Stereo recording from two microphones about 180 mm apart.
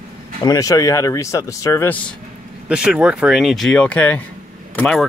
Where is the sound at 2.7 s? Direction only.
5° right (ahead or behind).